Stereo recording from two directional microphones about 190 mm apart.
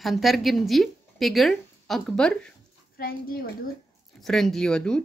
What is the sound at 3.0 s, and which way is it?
Speech, 50° left (ahead or behind).